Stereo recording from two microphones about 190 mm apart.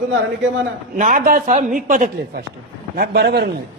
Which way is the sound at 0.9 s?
45° right (ahead or behind).